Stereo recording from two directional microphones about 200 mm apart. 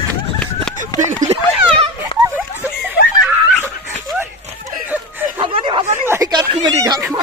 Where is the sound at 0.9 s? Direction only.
20° left (ahead or behind).